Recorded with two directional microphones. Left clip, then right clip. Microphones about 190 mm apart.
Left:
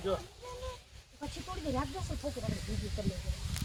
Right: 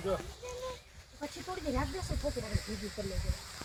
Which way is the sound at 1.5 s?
40° right (ahead or behind).